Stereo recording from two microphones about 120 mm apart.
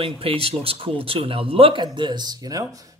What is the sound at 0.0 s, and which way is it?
A man's voice, 50° right (ahead or behind).